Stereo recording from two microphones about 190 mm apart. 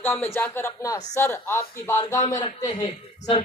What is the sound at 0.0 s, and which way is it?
Speech, 10° left (ahead or behind).